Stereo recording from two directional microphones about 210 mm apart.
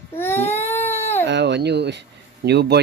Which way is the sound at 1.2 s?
55° right (ahead or behind).